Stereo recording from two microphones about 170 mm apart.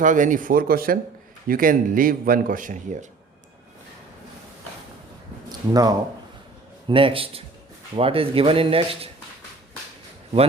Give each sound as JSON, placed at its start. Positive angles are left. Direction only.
{"t": 0.0, "sound": "a man's voice", "side_deg": -50}
{"t": 5.5, "sound": "a sound", "side_deg": -20}
{"t": 6.8, "sound": "speech", "side_deg": -30}